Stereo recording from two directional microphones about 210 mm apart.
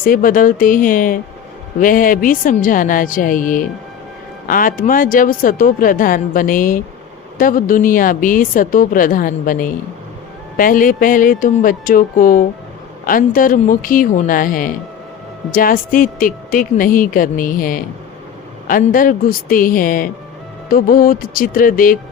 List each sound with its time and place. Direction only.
0.0 s speech: 40° left (ahead or behind)